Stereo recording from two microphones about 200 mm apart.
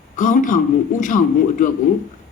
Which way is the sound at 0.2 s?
40° left (ahead or behind).